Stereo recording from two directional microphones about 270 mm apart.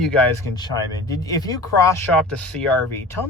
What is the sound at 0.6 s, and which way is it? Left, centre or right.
Speech, centre.